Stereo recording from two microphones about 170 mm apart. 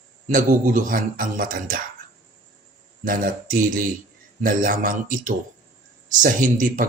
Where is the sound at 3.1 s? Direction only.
55° right (ahead or behind).